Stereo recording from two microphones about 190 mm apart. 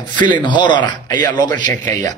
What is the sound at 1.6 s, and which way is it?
Speech, 40° right (ahead or behind).